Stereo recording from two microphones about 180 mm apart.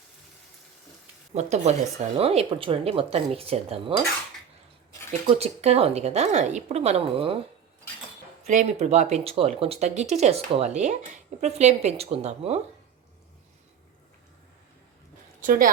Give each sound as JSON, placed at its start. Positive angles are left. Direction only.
{"t": 1.3, "sound": "speech", "side_deg": -40}
{"t": 5.2, "sound": "speech", "side_deg": -35}
{"t": 8.4, "sound": "speech", "side_deg": -40}
{"t": 15.4, "sound": "speech", "side_deg": -50}